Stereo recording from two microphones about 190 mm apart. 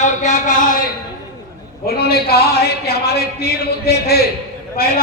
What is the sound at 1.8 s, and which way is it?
A man's voice, 55° left (ahead or behind).